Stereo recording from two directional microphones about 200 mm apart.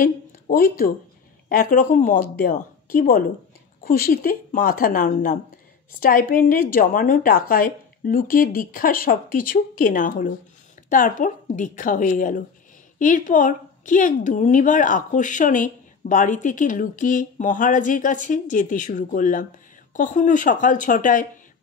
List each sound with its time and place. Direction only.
0.0 s a woman's voice: 45° left (ahead or behind)